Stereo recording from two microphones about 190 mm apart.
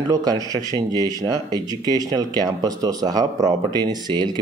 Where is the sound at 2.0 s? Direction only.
20° right (ahead or behind).